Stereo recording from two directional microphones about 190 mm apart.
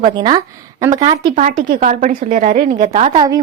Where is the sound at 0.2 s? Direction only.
25° right (ahead or behind).